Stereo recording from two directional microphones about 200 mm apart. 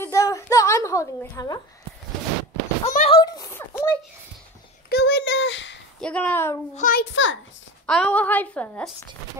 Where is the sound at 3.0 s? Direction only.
20° left (ahead or behind).